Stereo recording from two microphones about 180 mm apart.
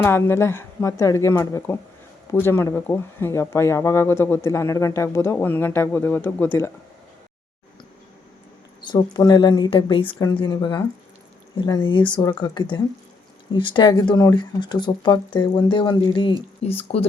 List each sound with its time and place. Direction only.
0.0 s speech: 15° left (ahead or behind)
8.9 s speech: 20° left (ahead or behind)